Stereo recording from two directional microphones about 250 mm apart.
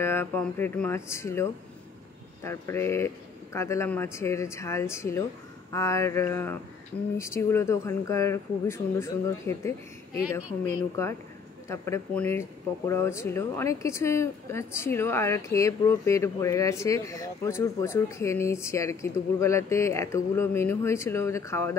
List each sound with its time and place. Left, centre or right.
0.0 s speech: centre